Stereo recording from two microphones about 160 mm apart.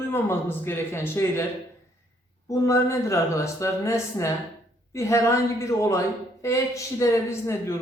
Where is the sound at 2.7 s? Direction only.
20° left (ahead or behind).